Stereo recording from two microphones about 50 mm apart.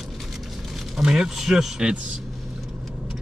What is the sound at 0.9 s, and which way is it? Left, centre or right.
A man's voice, centre.